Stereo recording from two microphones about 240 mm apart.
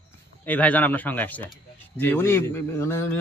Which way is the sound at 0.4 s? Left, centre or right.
Centre.